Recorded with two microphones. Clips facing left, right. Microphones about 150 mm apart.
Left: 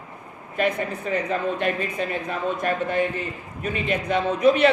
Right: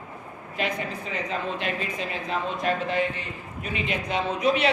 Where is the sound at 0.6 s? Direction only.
55° left (ahead or behind).